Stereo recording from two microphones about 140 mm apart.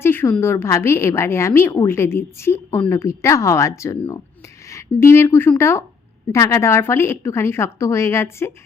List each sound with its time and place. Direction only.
0.0 s a woman's voice: 15° left (ahead or behind)